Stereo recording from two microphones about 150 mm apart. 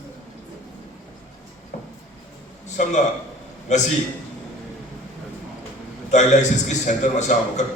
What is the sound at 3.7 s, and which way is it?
Speech, 55° left (ahead or behind).